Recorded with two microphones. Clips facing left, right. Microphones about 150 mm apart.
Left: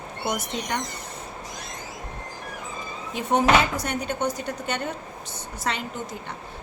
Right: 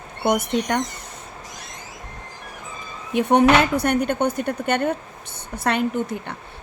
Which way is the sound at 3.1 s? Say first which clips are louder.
Right 5 dB; 60° right (ahead or behind).